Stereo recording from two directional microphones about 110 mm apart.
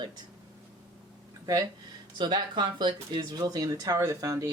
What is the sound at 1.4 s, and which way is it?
Speech, 35° right (ahead or behind).